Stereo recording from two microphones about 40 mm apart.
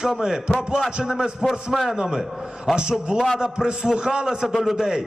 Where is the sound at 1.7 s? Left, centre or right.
Centre.